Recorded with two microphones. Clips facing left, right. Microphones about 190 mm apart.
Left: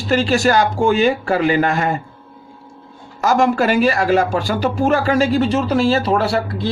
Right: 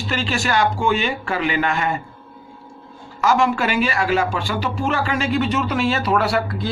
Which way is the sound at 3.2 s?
40° left (ahead or behind).